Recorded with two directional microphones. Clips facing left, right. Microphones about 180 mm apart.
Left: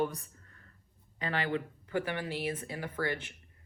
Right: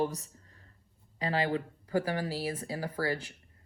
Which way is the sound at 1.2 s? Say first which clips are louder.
Right 3 dB; 35° right (ahead or behind).